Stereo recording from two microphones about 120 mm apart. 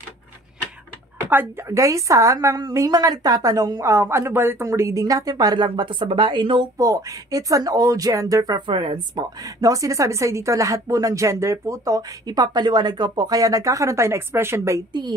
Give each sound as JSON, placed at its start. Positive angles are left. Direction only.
{"t": 1.3, "sound": "speech", "side_deg": -20}
{"t": 6.8, "sound": "speech", "side_deg": -30}
{"t": 14.9, "sound": "a woman's voice", "side_deg": -40}